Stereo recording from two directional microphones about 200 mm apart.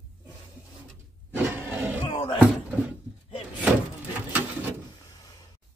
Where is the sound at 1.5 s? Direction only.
10° right (ahead or behind).